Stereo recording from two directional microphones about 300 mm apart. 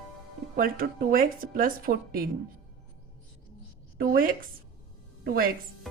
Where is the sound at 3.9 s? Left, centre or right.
Right.